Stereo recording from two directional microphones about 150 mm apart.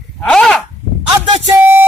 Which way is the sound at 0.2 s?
5° left (ahead or behind).